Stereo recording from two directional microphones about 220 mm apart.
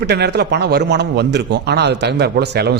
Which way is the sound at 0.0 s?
50° right (ahead or behind).